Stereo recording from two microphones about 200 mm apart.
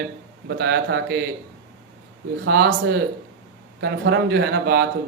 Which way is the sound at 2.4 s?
60° right (ahead or behind).